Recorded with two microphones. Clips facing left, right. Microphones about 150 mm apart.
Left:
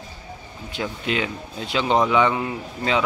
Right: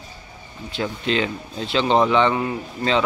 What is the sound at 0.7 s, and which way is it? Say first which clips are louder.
Speech: right 3 dB; 10° left (ahead or behind).